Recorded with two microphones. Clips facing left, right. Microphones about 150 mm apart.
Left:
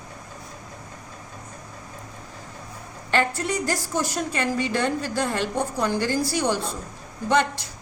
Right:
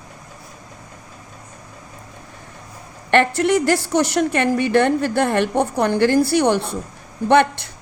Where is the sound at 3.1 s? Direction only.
70° right (ahead or behind).